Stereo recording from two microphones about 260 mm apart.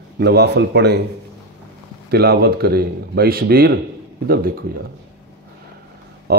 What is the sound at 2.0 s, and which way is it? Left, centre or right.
A man's voice, right.